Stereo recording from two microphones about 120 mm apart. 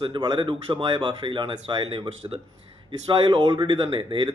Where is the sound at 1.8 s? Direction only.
50° right (ahead or behind).